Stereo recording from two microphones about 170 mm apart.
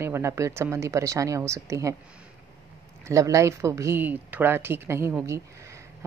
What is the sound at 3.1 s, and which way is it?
A woman's voice, 20° right (ahead or behind).